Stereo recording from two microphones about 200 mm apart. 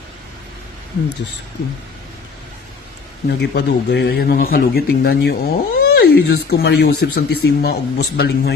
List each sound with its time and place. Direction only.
3.2 s speech: 55° left (ahead or behind)